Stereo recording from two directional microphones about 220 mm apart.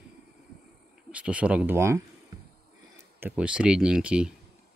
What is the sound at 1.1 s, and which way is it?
Speech, 5° right (ahead or behind).